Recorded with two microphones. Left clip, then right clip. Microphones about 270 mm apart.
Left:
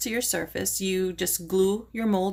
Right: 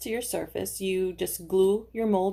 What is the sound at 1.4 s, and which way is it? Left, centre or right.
Speech, left.